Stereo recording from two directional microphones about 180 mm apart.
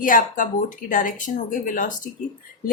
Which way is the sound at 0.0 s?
50° left (ahead or behind).